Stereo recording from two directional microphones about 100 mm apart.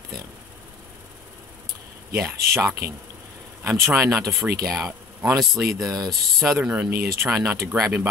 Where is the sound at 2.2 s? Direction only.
25° right (ahead or behind).